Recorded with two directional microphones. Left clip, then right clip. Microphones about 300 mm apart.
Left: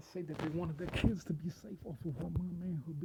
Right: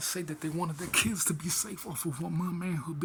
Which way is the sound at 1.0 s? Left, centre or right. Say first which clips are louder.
Right 10 dB; left.